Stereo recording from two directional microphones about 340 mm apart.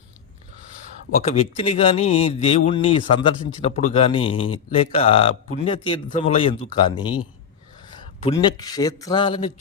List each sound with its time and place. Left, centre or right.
1.1 s speech: centre
8.2 s speech: centre